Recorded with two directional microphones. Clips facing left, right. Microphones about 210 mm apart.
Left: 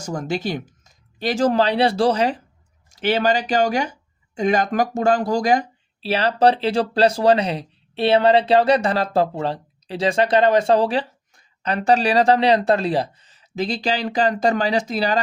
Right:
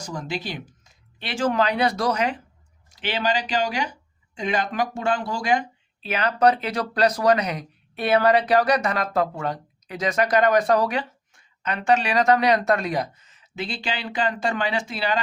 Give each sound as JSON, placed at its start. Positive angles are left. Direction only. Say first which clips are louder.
{"t": 0.0, "sound": "speech", "louder": "left 6 dB", "side_deg": 45}
{"t": 2.9, "sound": "speech", "louder": "left 6 dB", "side_deg": 45}